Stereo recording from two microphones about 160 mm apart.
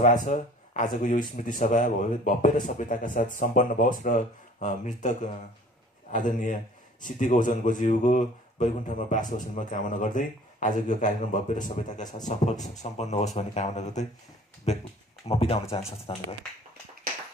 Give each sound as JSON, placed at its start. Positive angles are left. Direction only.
{"t": 0.0, "sound": "speech", "side_deg": 50}
{"t": 12.8, "sound": "speech", "side_deg": 45}